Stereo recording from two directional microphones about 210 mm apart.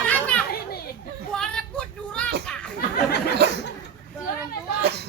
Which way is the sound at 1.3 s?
5° left (ahead or behind).